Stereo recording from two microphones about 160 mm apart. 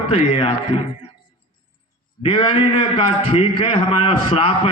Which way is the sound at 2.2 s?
35° left (ahead or behind).